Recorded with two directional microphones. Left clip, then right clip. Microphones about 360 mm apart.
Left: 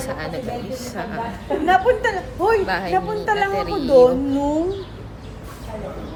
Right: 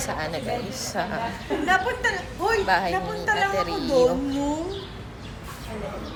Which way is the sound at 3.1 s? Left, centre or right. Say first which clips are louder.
Left 3 dB; centre.